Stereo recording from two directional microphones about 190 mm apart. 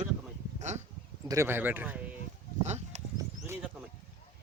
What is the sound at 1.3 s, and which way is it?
Speech, 15° right (ahead or behind).